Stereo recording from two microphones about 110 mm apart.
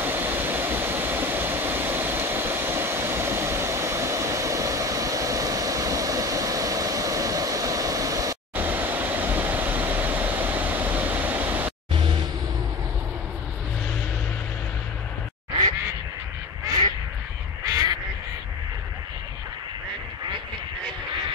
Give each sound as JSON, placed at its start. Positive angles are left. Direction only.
{"t": 0.0, "sound": "vehicle", "side_deg": -20}
{"t": 8.5, "sound": "vehicle", "side_deg": -15}
{"t": 17.6, "sound": "duck", "side_deg": -30}